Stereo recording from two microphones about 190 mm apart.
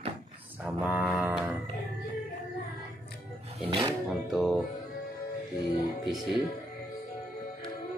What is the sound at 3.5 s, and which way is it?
Speech, 30° right (ahead or behind).